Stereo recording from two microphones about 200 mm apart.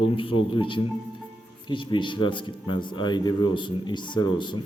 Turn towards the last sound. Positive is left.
turn(degrees=20)  # may be behind; listen again after turning